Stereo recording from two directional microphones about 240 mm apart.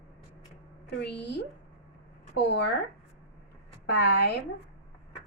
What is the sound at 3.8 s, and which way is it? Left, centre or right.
Speech, left.